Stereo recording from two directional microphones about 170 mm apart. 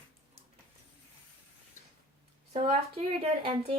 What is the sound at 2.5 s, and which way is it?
Speech, 40° right (ahead or behind).